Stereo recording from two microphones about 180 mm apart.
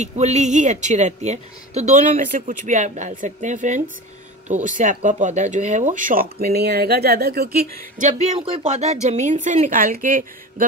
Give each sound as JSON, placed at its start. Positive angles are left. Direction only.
{"t": 0.0, "sound": "a woman's voice", "side_deg": -40}
{"t": 6.3, "sound": "speech", "side_deg": -60}
{"t": 8.1, "sound": "a woman's voice", "side_deg": -35}